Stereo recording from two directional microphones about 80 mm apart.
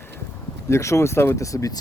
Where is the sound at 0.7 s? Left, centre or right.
Left.